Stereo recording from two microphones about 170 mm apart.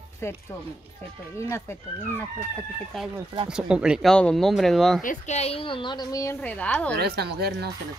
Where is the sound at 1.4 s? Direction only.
15° left (ahead or behind).